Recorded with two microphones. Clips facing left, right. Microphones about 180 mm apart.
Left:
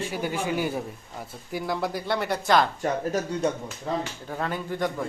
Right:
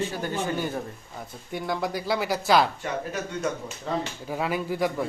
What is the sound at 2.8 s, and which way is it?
Speech, 40° left (ahead or behind).